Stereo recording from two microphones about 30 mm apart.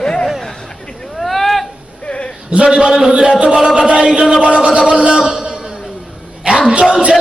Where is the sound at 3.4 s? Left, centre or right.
Right.